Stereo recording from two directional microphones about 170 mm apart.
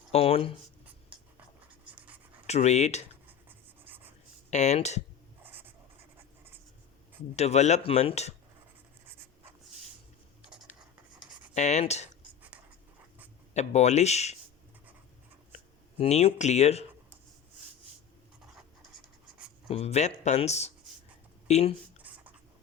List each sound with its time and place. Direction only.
0.1 s writing: 35° left (ahead or behind)
2.5 s speech: 40° left (ahead or behind)
3.8 s writing: 10° right (ahead or behind)
4.5 s speech: 40° left (ahead or behind)
5.4 s writing: 10° right (ahead or behind)
7.3 s speech: 40° left (ahead or behind)
11.5 s speech: 45° left (ahead or behind)
13.5 s speech: 40° left (ahead or behind)
15.5 s speech: 40° left (ahead or behind)
18.5 s writing: centre (ahead or behind)
19.6 s speech: 35° left (ahead or behind)
22.1 s writing: 10° right (ahead or behind)